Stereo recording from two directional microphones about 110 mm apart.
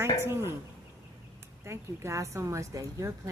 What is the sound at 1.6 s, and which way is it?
Speech, 25° right (ahead or behind).